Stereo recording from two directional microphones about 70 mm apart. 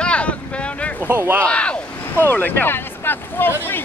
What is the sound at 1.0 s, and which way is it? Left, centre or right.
Speech, right.